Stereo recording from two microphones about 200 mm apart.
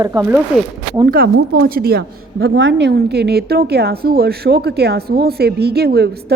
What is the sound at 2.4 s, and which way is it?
A woman's voice, 75° right (ahead or behind).